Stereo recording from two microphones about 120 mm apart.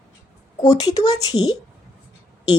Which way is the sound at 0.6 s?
35° left (ahead or behind).